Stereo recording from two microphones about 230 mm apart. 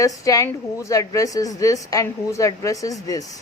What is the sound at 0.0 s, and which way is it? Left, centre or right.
A woman's voice, centre.